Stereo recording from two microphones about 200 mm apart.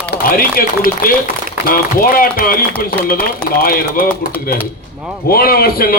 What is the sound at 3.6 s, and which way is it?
Speech, 50° left (ahead or behind).